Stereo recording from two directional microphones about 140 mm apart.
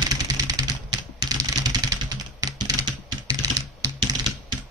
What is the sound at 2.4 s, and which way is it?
Computer keyboard, 30° right (ahead or behind).